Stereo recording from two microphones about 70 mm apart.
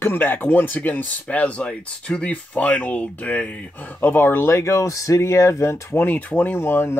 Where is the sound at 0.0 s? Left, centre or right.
Left.